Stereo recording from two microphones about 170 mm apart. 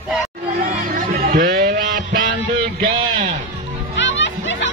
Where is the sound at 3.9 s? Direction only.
90° left.